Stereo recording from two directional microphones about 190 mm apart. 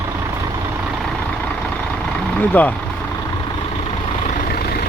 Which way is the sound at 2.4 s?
10° left (ahead or behind).